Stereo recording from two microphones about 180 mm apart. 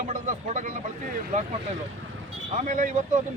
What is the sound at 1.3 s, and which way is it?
Speech, 40° right (ahead or behind).